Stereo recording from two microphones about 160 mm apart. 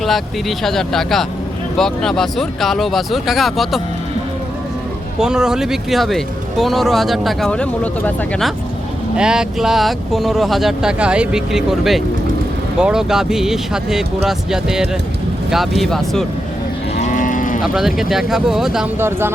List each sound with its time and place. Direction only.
0.0 s speech: centre (ahead or behind)
5.2 s speech: 5° right (ahead or behind)
17.0 s cattle: 55° left (ahead or behind)
17.6 s speech: 5° right (ahead or behind)
18.9 s speech: 15° right (ahead or behind)